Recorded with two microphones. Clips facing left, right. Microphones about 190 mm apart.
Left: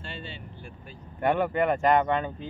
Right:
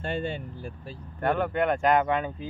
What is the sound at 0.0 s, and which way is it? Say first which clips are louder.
Speech: right 10 dB; 50° right (ahead or behind).